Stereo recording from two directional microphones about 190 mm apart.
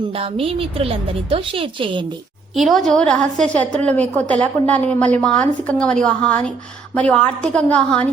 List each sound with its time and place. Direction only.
0.1 s a woman's voice: 30° right (ahead or behind)
2.6 s a woman's voice: centre (ahead or behind)